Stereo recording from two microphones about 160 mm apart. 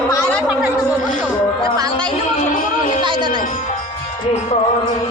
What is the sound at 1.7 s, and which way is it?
Music, 25° right (ahead or behind).